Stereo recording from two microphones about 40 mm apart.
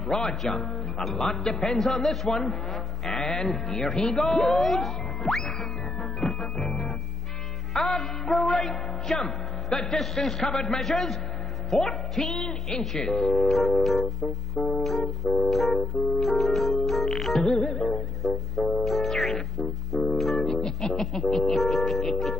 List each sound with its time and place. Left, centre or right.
0.0 s music: centre
4.0 s speech: centre
6.2 s music: centre
13.3 s music: centre
18.2 s music: centre